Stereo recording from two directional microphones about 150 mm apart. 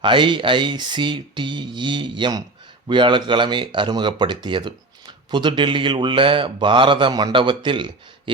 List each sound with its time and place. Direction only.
0.0 s speech: 35° right (ahead or behind)